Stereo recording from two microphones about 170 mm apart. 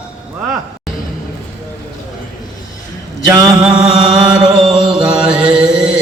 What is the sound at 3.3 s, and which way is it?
Mantra, 25° right (ahead or behind).